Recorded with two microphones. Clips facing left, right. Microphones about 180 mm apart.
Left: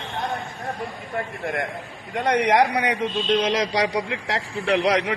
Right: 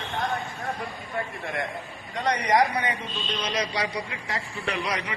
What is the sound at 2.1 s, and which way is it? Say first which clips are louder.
A man's voice: left 4 dB; 65° left (ahead or behind).